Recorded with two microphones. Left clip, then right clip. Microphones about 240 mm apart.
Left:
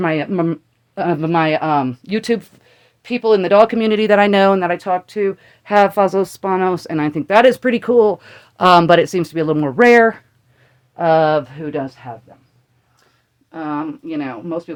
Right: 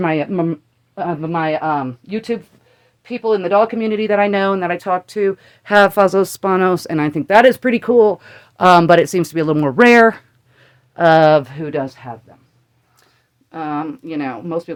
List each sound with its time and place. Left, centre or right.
0.0 s speech: centre
0.3 s speech: centre
0.9 s speech: left
4.7 s speech: centre; by 12.1 s right
13.5 s speech: right